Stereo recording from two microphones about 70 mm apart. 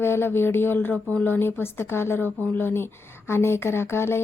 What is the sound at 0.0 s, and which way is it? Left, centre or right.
Speech, left.